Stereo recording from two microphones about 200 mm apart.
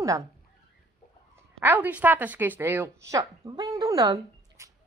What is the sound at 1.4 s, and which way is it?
A woman's voice, 10° right (ahead or behind).